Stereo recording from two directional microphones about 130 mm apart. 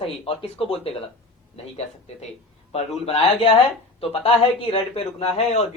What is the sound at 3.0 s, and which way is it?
A man's voice, 50° left (ahead or behind).